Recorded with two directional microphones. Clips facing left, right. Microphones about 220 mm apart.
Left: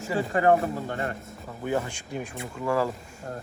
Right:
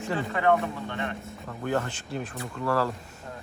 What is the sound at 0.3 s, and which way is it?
Speech, 40° left (ahead or behind).